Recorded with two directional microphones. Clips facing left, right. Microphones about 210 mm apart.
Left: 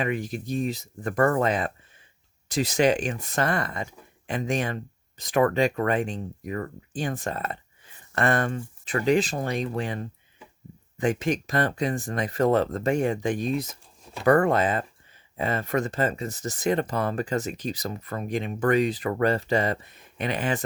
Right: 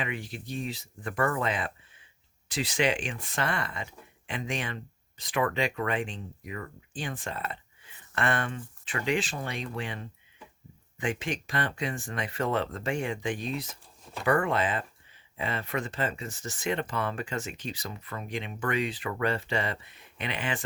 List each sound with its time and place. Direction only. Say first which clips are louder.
0.0 s speech: left 8 dB; 45° left (ahead or behind)